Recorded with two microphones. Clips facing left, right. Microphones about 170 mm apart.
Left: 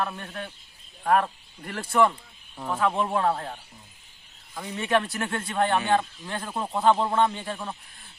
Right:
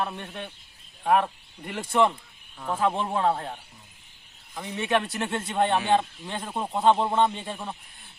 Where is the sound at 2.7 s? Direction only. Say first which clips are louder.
Left 1 dB; 25° right (ahead or behind).